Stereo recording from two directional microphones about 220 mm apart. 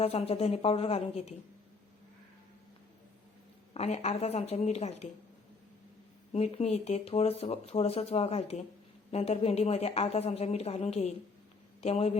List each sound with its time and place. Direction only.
0.0 s speech: 25° left (ahead or behind)
3.8 s speech: 30° left (ahead or behind)
6.3 s speech: 30° left (ahead or behind)